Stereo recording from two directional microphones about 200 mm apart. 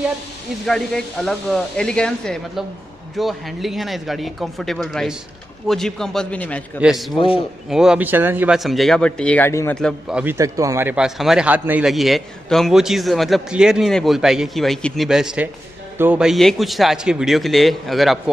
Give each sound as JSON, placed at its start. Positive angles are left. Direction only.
{"t": 0.7, "sound": "a man's voice", "side_deg": 5}
{"t": 7.2, "sound": "a man's voice", "side_deg": 25}
{"t": 7.7, "sound": "a man's voice", "side_deg": -5}
{"t": 9.8, "sound": "a man's voice", "side_deg": 0}